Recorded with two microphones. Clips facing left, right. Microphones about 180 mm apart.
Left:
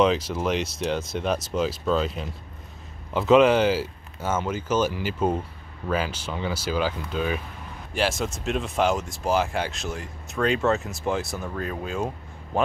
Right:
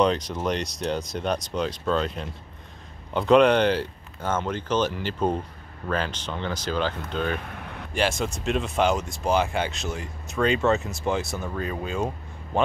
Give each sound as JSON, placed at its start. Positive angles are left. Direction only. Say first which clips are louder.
{"t": 0.0, "sound": "speech", "louder": "left 1 dB", "side_deg": 5}
{"t": 7.4, "sound": "vehicle", "louder": "right 3 dB", "side_deg": -65}
{"t": 7.9, "sound": "speech", "louder": "even", "side_deg": 0}